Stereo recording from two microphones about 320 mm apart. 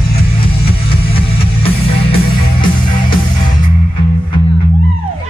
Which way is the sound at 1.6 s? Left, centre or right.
Centre.